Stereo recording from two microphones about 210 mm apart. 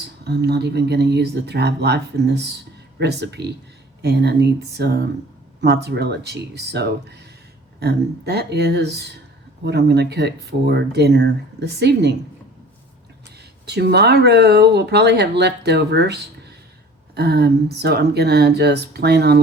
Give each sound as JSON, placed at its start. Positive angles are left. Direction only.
{"t": 0.3, "sound": "speech", "side_deg": -50}
{"t": 13.7, "sound": "speech", "side_deg": -50}